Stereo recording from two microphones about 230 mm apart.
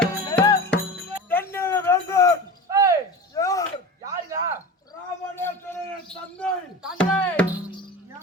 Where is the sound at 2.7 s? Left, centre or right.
Centre.